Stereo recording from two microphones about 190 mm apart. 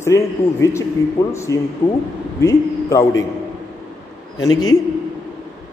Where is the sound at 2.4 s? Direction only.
15° left (ahead or behind).